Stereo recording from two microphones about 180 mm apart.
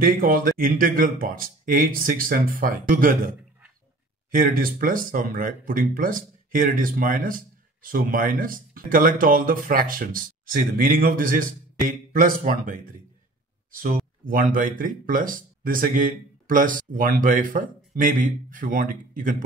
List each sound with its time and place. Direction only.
0.0 s speech: 50° right (ahead or behind)
4.3 s speech: 50° right (ahead or behind)